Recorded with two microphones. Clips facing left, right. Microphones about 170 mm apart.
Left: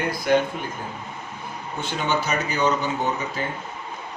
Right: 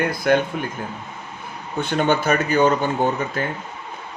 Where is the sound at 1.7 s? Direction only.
60° right (ahead or behind).